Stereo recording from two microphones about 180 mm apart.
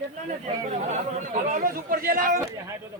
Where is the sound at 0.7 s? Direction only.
40° right (ahead or behind).